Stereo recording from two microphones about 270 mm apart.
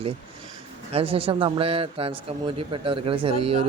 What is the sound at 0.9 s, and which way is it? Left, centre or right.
Speech, right.